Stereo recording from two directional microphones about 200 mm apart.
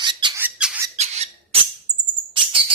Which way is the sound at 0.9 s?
35° right (ahead or behind).